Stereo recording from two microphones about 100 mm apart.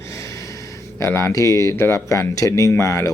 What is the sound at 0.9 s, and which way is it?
Speech, 30° left (ahead or behind).